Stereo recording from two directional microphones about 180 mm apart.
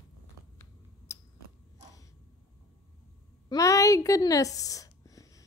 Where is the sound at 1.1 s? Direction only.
15° left (ahead or behind).